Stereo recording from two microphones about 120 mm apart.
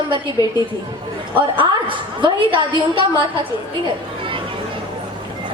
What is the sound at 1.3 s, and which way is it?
A woman's voice, 45° right (ahead or behind).